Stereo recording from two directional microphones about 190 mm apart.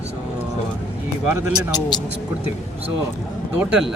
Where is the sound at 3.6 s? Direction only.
5° right (ahead or behind).